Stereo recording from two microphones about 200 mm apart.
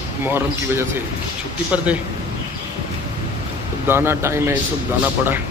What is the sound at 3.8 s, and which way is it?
Speech, 10° right (ahead or behind).